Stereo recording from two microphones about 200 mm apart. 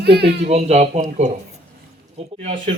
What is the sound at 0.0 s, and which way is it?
Speech, 55° right (ahead or behind).